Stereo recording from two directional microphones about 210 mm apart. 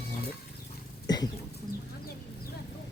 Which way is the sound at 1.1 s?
20° left (ahead or behind).